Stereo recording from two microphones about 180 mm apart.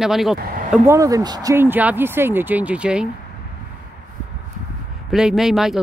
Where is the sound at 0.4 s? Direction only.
55° right (ahead or behind).